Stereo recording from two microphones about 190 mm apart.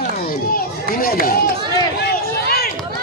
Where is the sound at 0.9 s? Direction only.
50° left (ahead or behind).